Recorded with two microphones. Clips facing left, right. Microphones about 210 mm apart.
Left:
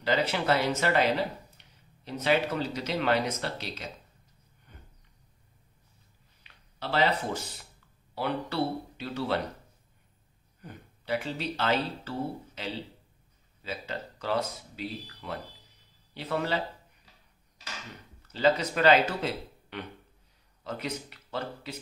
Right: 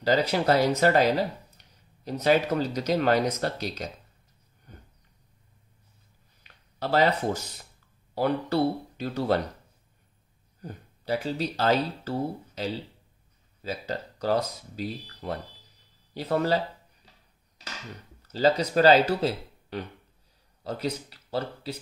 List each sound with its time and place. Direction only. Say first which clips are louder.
0.0 s speech: right 4 dB; 40° right (ahead or behind)
4.7 s a sound: right 5 dB; 40° right (ahead or behind)
6.4 s a sound: right 5 dB; 45° right (ahead or behind)
8.1 s speech: right 6 dB; 40° right (ahead or behind)
10.6 s speech: right 5 dB; 40° right (ahead or behind)
18.3 s speech: right 3 dB; 35° right (ahead or behind)